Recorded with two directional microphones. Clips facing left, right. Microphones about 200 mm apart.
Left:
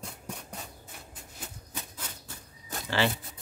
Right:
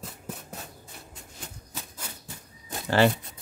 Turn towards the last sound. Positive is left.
turn(degrees=-45)  # may be behind; listen again after turning